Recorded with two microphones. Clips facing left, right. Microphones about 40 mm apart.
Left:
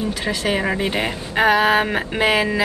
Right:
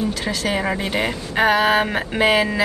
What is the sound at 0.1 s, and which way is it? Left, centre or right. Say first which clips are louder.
Speech: left 1 dB; left.